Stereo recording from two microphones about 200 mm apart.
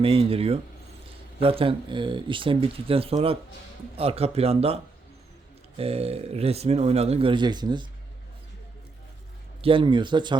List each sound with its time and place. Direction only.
0.0 s speech: 30° right (ahead or behind)
9.6 s speech: 25° right (ahead or behind)